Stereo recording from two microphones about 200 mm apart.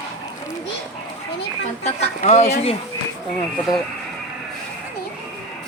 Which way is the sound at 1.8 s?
35° left (ahead or behind).